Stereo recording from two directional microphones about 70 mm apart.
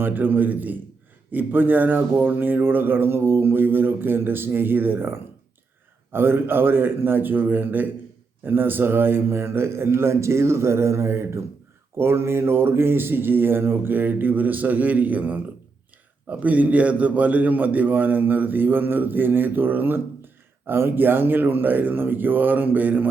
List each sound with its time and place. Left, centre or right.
0.0 s a man's voice: right